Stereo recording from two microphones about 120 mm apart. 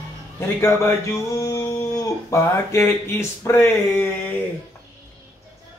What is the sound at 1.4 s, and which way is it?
Speech, 25° left (ahead or behind).